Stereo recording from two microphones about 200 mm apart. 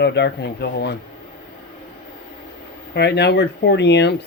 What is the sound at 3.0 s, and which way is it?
Speech, 55° left (ahead or behind).